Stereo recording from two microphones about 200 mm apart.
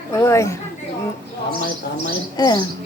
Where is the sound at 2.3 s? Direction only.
20° left (ahead or behind).